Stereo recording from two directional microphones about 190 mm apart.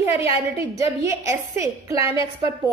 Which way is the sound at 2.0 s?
30° left (ahead or behind).